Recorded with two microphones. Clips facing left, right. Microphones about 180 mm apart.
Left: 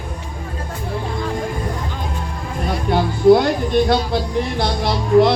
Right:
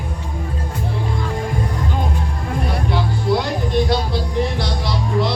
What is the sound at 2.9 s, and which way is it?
Music, 50° left (ahead or behind).